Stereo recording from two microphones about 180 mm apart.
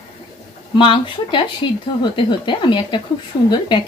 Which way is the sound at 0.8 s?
30° left (ahead or behind).